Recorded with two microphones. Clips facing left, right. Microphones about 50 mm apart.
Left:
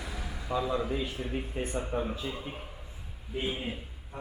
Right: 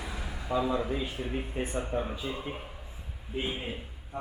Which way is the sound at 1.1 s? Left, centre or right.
Centre.